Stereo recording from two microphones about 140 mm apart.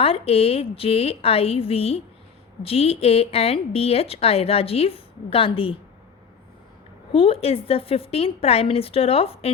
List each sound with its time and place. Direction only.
0.0 s speech: 45° left (ahead or behind)
7.1 s speech: 45° left (ahead or behind)